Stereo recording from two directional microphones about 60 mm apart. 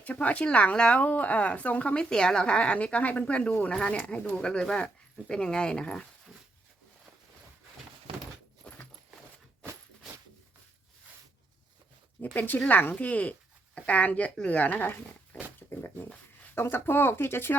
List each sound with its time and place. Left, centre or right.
0.0 s speech: left
4.4 s speech: centre
8.6 s a sound: centre
12.2 s speech: left
16.6 s speech: left